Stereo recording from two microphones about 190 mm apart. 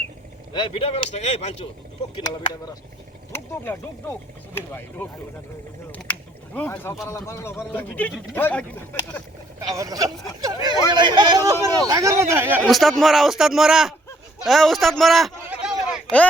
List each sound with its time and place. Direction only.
0.5 s speech: 25° left (ahead or behind)
3.3 s speech: 10° left (ahead or behind)
5.9 s a sound: 10° left (ahead or behind)
7.3 s speech: 15° left (ahead or behind)
9.6 s speech: 20° right (ahead or behind)
12.6 s a man's voice: centre (ahead or behind)
14.4 s a sound: centre (ahead or behind)